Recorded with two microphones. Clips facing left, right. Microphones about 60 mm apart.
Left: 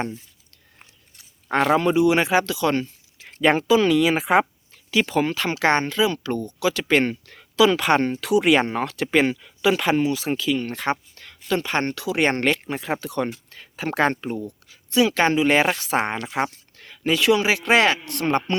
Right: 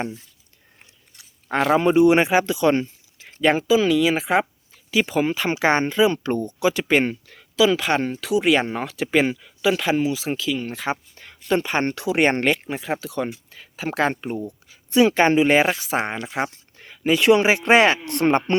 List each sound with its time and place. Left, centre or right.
1.5 s speech: centre
2.0 s speech: right
3.2 s speech: centre
4.9 s speech: centre; by 6.8 s right
6.8 s speech: centre
11.1 s speech: centre
12.4 s speech: centre
14.4 s a sound: centre
15.1 s speech: right
15.4 s speech: centre
16.7 s a sound: centre
17.2 s speech: right